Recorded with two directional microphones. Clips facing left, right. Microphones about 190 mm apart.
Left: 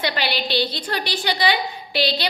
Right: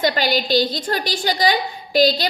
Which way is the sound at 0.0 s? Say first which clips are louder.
Right 5 dB; 45° right (ahead or behind).